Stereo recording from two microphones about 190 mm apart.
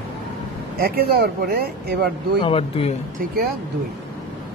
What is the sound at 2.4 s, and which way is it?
Speech, 30° left (ahead or behind).